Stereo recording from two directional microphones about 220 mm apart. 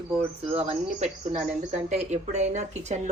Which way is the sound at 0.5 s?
30° right (ahead or behind).